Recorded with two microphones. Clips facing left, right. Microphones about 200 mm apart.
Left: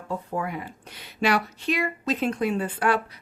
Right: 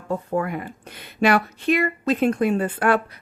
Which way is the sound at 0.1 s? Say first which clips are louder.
Right 5 dB; 55° right (ahead or behind).